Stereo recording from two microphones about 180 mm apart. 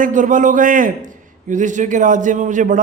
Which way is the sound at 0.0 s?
45° right (ahead or behind).